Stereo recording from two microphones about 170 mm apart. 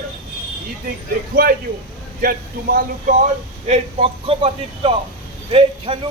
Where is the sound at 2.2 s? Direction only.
60° right (ahead or behind).